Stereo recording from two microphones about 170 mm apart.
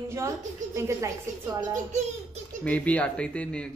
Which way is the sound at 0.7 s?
15° right (ahead or behind).